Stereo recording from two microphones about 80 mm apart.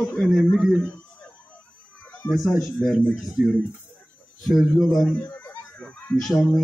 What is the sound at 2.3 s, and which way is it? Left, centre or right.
A man's voice, centre.